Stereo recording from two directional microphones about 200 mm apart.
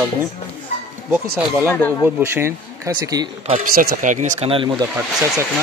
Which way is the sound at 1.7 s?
10° left (ahead or behind).